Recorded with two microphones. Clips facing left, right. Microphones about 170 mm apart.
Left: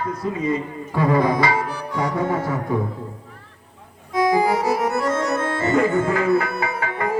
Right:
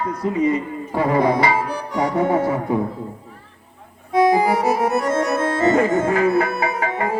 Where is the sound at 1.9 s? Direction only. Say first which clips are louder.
Right 4 dB; 10° right (ahead or behind).